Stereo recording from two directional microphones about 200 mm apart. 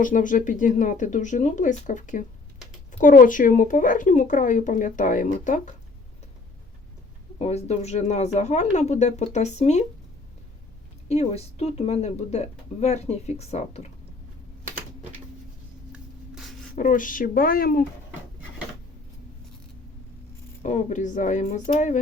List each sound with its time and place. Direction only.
0.0 s speech: 40° left (ahead or behind)
7.3 s speech: 35° left (ahead or behind)
11.1 s speech: 35° left (ahead or behind)
15.9 s a sound: 5° right (ahead or behind)
16.7 s speech: 40° left (ahead or behind)
20.6 s speech: 40° left (ahead or behind)